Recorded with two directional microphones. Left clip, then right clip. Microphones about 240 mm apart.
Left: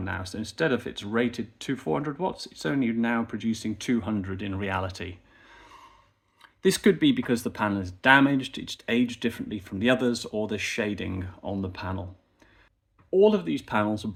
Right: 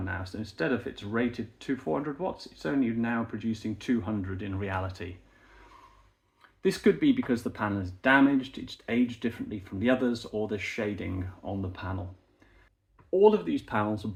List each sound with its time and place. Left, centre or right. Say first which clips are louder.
0.0 s speech: left 3 dB; left
6.4 s speech: left 3 dB; left
13.1 s speech: left 1 dB; left